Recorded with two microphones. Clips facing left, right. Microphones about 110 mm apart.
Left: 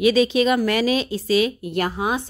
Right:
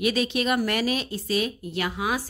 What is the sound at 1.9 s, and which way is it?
Speech, 30° left (ahead or behind).